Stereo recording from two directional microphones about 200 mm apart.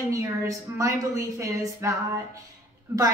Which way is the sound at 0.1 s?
15° right (ahead or behind).